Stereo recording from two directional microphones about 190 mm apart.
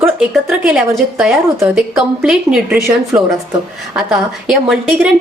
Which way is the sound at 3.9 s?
5° right (ahead or behind).